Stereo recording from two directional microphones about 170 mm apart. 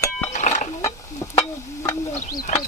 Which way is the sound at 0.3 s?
45° left (ahead or behind).